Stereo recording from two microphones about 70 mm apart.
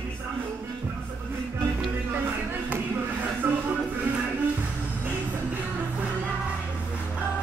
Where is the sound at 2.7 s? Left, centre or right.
Right.